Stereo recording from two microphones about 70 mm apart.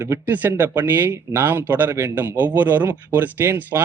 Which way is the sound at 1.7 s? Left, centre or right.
Right.